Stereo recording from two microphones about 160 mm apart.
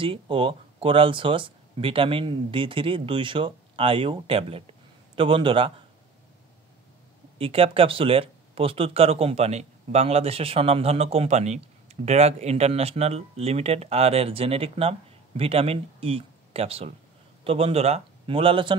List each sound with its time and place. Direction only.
0.0 s speech: 35° right (ahead or behind)
7.3 s speech: 35° right (ahead or behind)